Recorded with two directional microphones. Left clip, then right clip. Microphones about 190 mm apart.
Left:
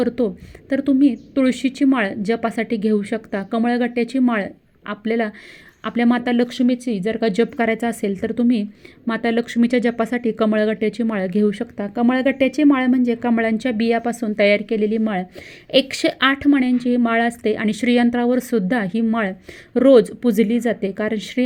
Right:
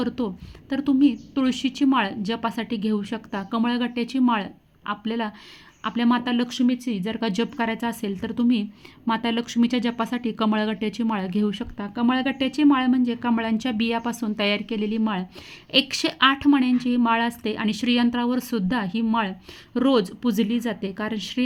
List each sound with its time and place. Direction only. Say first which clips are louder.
0.7 s a woman's voice: left 4 dB; 15° left (ahead or behind)